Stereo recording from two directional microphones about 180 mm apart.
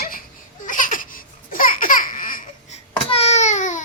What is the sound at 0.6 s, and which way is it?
Laughter, 45° left (ahead or behind).